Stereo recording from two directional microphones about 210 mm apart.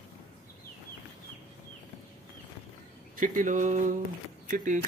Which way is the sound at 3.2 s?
40° right (ahead or behind).